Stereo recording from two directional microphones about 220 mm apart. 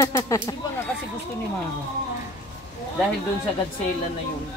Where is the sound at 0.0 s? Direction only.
15° left (ahead or behind).